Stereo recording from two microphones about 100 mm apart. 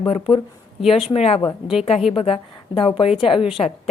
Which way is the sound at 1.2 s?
90° left.